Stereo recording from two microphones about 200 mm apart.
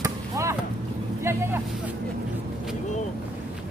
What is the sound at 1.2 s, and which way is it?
Vehicle, 10° right (ahead or behind).